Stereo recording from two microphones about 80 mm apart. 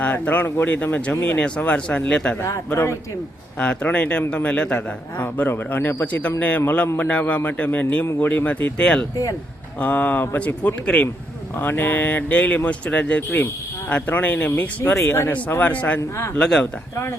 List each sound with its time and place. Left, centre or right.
0.0 s speech: centre
2.6 s speech: left
3.6 s speech: centre
5.1 s speech: left
6.6 s speech: left
14.9 s speech: left
15.3 s speech: left